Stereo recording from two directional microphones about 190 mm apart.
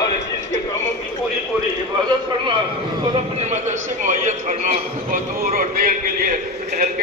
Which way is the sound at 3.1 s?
35° right (ahead or behind).